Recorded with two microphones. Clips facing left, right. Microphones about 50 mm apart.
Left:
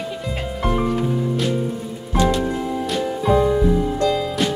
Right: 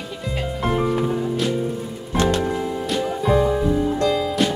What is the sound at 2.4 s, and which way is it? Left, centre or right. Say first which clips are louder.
Music: left 1 dB; centre.